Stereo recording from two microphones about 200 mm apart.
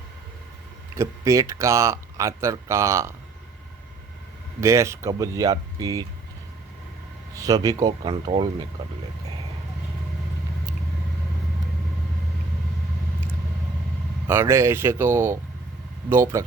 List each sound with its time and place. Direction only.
0.9 s speech: 15° right (ahead or behind)
4.6 s speech: 15° right (ahead or behind)
7.3 s speech: 20° right (ahead or behind)
14.3 s speech: 15° right (ahead or behind)